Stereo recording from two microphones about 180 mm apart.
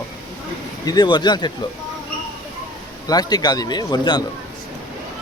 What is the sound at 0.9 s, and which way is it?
Speech, 25° left (ahead or behind).